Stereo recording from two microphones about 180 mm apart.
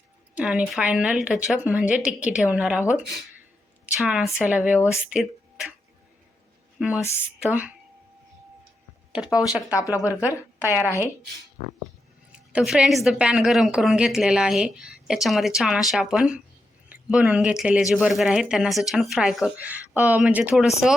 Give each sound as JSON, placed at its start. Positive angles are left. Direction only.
{"t": 0.3, "sound": "a woman's voice", "side_deg": -5}
{"t": 6.7, "sound": "a woman's voice", "side_deg": -5}
{"t": 9.1, "sound": "a woman's voice", "side_deg": -5}
{"t": 9.7, "sound": "speech", "side_deg": 20}
{"t": 10.2, "sound": "a woman's voice", "side_deg": -10}
{"t": 12.3, "sound": "a woman's voice", "side_deg": -5}